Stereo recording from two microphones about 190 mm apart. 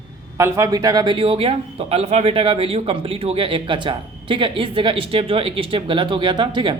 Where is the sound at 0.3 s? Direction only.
15° right (ahead or behind).